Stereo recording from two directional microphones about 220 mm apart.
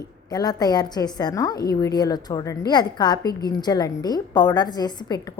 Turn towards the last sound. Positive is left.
turn(degrees=20)  # may be behind; listen again after turning